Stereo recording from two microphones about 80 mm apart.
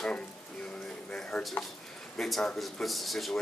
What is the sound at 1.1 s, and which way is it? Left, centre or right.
Speech, centre.